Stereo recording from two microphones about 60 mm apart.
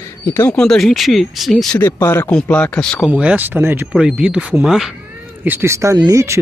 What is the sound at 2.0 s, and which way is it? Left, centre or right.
Speech, left.